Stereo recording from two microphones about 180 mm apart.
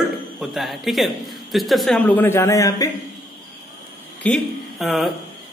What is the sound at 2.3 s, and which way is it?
Speech, 15° left (ahead or behind).